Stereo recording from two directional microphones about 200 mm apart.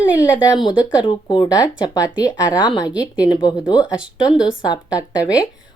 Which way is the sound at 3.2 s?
20° left (ahead or behind).